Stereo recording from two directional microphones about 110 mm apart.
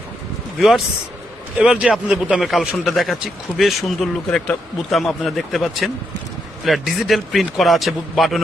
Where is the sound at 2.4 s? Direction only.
Centre (ahead or behind).